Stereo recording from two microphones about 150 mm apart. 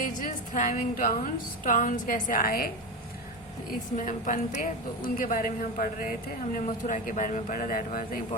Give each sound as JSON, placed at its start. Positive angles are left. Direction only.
{"t": 0.0, "sound": "music", "side_deg": 60}
{"t": 1.6, "sound": "a woman's voice", "side_deg": 60}
{"t": 3.9, "sound": "a woman's voice", "side_deg": 60}